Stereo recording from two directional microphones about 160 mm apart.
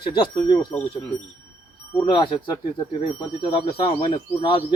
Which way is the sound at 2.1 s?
30° left (ahead or behind).